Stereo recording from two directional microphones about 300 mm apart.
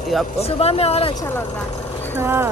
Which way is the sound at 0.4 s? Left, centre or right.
Centre.